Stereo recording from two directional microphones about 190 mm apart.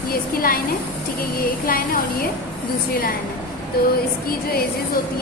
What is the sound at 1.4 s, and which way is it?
Speech, 50° left (ahead or behind).